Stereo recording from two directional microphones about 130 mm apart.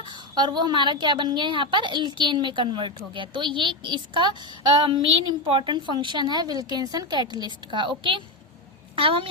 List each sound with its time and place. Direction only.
0.0 s a woman's voice: 35° right (ahead or behind)